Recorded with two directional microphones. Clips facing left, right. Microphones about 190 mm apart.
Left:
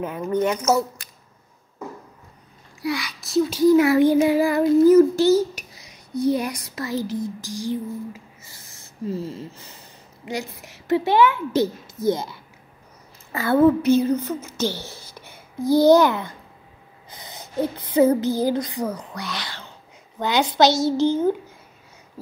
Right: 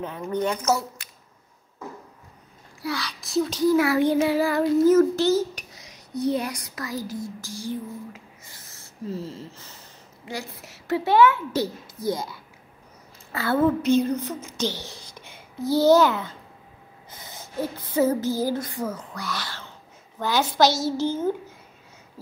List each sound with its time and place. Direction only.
2.8 s child singing: 15° left (ahead or behind)
3.2 s speech: centre (ahead or behind)
3.7 s child singing: 20° left (ahead or behind)
6.5 s a woman's voice: 25° left (ahead or behind)
17.1 s a sound: 15° left (ahead or behind)
20.2 s speech: 20° left (ahead or behind)
21.0 s child singing: 20° left (ahead or behind)